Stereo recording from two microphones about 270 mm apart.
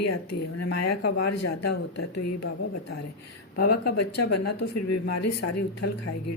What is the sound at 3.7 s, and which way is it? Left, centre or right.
A woman's voice, left.